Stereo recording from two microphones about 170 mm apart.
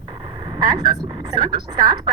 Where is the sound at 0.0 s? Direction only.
30° right (ahead or behind).